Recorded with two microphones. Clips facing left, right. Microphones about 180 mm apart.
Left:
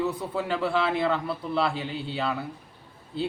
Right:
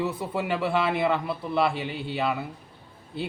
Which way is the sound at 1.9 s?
60° right (ahead or behind).